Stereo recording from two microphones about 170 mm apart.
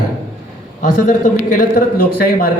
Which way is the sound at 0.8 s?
50° left (ahead or behind).